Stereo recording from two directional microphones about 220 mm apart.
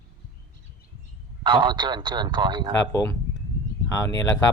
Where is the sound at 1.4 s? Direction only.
20° right (ahead or behind).